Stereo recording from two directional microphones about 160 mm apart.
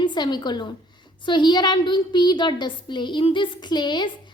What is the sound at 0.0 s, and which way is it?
A woman's voice, 25° left (ahead or behind).